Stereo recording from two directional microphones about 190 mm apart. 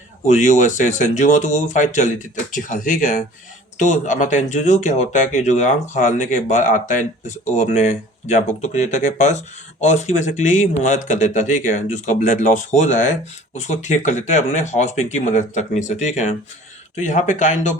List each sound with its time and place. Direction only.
0.3 s speech: 40° left (ahead or behind)